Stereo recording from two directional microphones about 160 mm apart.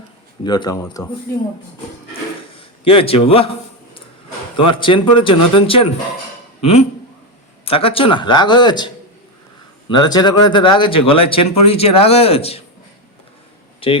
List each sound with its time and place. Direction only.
0.4 s speech: 25° left (ahead or behind)
2.6 s a man's voice: 35° left (ahead or behind)
4.5 s speech: 30° left (ahead or behind)
9.9 s speech: 25° left (ahead or behind)
13.8 s speech: 35° left (ahead or behind)